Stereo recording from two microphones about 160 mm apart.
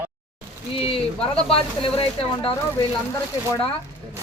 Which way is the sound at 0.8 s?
35° left (ahead or behind).